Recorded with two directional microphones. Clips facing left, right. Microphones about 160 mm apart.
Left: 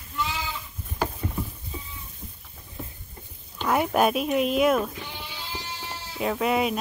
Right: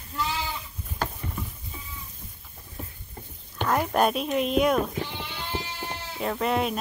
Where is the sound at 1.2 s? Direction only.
25° left (ahead or behind).